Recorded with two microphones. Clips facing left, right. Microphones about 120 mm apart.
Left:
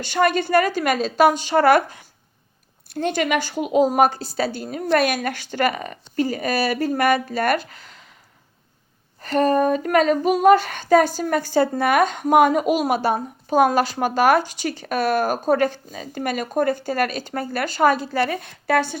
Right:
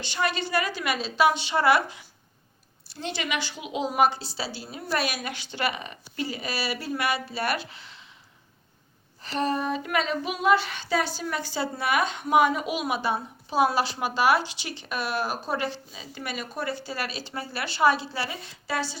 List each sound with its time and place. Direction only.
0.0 s female singing: 50° left (ahead or behind)
9.2 s female singing: 50° left (ahead or behind)